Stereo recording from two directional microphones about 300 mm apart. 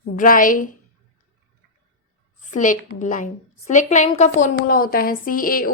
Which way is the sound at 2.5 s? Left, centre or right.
Left.